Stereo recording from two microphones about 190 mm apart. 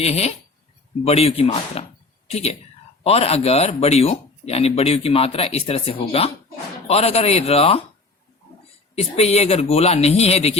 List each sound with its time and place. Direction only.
0.0 s speech: 35° left (ahead or behind)
9.0 s speech: 35° left (ahead or behind)